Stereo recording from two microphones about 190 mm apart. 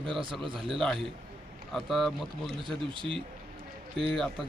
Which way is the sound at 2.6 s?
25° right (ahead or behind).